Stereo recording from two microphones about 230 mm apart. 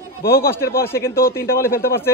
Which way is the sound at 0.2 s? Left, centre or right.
Left.